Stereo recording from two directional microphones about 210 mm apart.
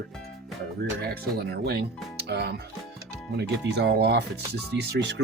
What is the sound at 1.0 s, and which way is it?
Speech, 50° right (ahead or behind).